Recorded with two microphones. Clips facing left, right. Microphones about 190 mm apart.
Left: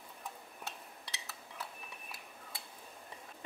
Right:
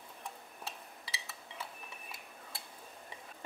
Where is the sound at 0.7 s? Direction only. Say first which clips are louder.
Right 2 dB; centre (ahead or behind).